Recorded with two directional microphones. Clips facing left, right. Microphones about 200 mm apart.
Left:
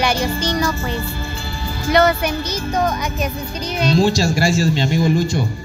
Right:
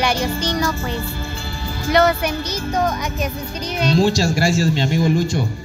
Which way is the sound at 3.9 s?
55° right (ahead or behind).